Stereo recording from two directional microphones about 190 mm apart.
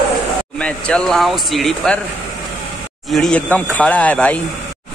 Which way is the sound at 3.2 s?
5° left (ahead or behind).